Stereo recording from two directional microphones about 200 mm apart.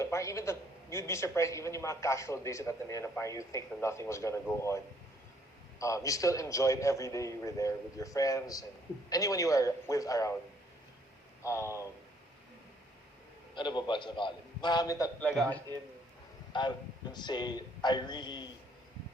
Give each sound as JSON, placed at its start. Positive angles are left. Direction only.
{"t": 0.0, "sound": "a man's voice", "side_deg": 15}
{"t": 5.8, "sound": "a man's voice", "side_deg": 15}
{"t": 11.4, "sound": "a man's voice", "side_deg": 15}
{"t": 13.6, "sound": "a man's voice", "side_deg": 25}
{"t": 15.3, "sound": "a man's voice", "side_deg": 5}
{"t": 16.5, "sound": "speech", "side_deg": 20}